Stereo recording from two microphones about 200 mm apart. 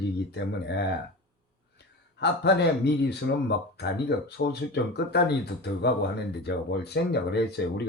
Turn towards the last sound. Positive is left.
turn(degrees=55)  # may be behind; listen again after turning